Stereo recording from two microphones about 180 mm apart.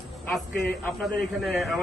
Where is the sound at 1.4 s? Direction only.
Centre (ahead or behind).